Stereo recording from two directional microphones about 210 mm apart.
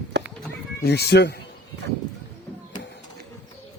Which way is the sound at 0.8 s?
50° left (ahead or behind).